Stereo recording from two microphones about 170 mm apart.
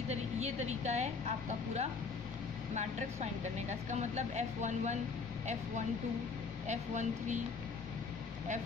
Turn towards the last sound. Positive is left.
turn(degrees=-45)  # may be behind; listen again after turning